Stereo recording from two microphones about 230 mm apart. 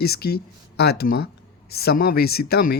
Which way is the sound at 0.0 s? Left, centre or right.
Left.